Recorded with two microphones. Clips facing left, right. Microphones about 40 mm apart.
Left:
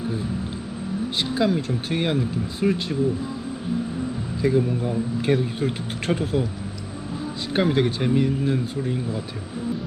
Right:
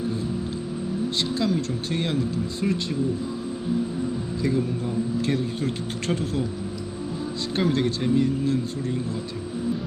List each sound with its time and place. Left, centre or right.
1.4 s speech: centre
4.4 s speech: centre
7.5 s speech: centre